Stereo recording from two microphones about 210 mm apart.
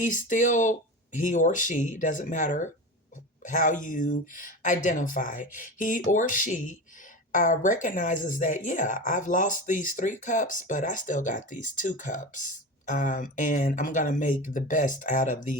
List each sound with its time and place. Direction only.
0.0 s speech: 35° left (ahead or behind)